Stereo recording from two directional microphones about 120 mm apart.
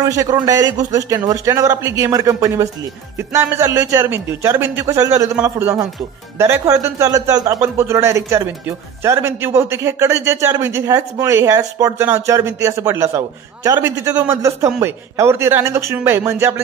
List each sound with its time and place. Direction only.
0.0 s speech: 30° right (ahead or behind)